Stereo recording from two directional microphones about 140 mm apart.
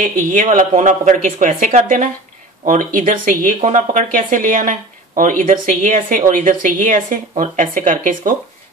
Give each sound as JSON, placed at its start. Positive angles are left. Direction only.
{"t": 0.0, "sound": "speech", "side_deg": -70}
{"t": 2.6, "sound": "speech", "side_deg": -70}